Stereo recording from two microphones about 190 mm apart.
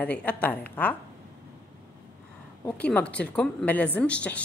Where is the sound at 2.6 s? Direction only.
5° left (ahead or behind).